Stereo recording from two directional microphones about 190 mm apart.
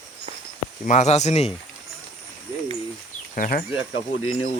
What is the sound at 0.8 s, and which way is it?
Speech, 40° left (ahead or behind).